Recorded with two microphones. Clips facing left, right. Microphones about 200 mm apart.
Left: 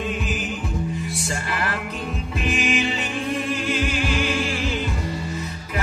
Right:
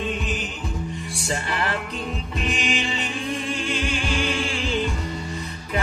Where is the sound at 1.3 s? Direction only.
25° right (ahead or behind).